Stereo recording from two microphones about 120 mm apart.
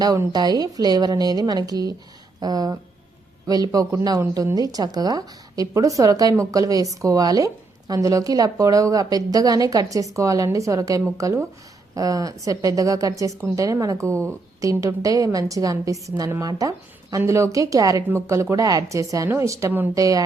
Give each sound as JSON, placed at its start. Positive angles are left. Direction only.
{"t": 0.3, "sound": "a woman's voice", "side_deg": -35}
{"t": 4.2, "sound": "a woman's voice", "side_deg": -20}
{"t": 4.5, "sound": "a woman's voice", "side_deg": -30}